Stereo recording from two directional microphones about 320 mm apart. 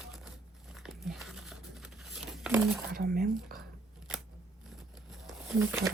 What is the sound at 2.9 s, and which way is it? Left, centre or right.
Speech, right.